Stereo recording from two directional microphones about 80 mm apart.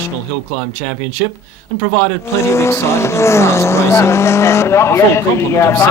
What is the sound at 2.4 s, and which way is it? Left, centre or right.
Speech, left.